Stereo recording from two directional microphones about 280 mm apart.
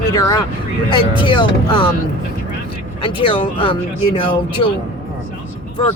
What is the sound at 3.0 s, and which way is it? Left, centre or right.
Speech, centre.